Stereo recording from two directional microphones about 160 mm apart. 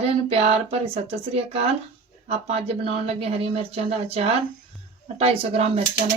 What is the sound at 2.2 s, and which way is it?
Speech, 40° right (ahead or behind).